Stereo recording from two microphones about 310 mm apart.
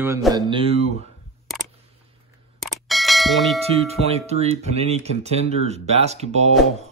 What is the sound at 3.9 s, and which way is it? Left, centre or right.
Speech, centre.